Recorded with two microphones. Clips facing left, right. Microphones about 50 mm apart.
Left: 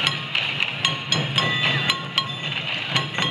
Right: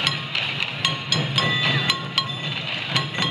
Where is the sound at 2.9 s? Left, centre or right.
Centre.